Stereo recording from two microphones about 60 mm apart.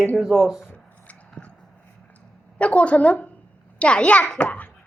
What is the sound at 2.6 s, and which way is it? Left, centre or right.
A child's voice, left.